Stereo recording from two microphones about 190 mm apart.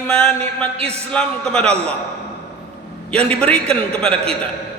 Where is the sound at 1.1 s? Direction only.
5° left (ahead or behind).